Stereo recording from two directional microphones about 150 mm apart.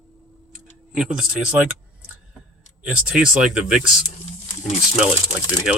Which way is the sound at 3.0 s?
5° right (ahead or behind).